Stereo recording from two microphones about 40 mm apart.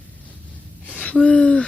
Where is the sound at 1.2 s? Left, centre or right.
Left.